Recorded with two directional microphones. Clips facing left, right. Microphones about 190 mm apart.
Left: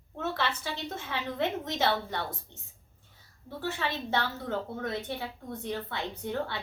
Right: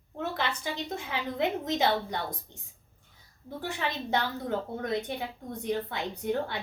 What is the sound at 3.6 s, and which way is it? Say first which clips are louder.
Speech: even; 15° right (ahead or behind).